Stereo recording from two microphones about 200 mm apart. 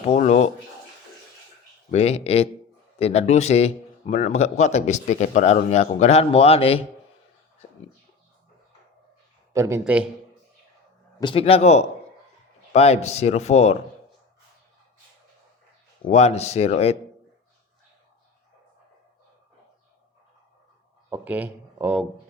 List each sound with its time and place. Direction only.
0.0 s speech: 35° left (ahead or behind)
1.9 s speech: 30° left (ahead or behind)
9.5 s speech: 15° right (ahead or behind)
11.2 s speech: 25° left (ahead or behind)
16.0 s speech: 35° left (ahead or behind)
21.1 s speech: 10° right (ahead or behind)